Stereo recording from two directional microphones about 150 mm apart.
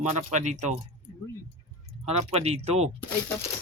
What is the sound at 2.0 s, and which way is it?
Speech, 45° right (ahead or behind).